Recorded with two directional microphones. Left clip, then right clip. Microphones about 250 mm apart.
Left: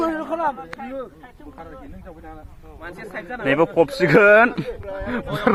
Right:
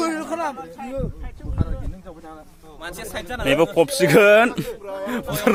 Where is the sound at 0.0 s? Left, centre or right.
Left.